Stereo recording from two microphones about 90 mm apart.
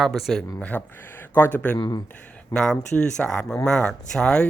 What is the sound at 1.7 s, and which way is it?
Speech, 50° left (ahead or behind).